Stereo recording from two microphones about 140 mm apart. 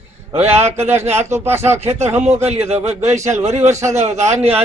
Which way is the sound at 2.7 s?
50° right (ahead or behind).